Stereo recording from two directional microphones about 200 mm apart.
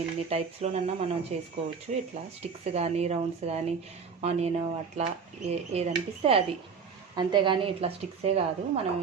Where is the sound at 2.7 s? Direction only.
30° right (ahead or behind).